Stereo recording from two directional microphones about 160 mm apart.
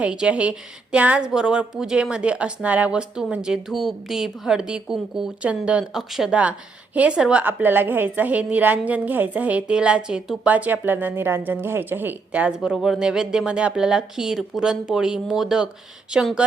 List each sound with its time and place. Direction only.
0.0 s a woman's voice: 5° right (ahead or behind)